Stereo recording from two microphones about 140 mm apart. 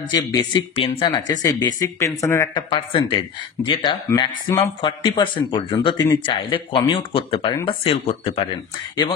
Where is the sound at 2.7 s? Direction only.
40° left (ahead or behind).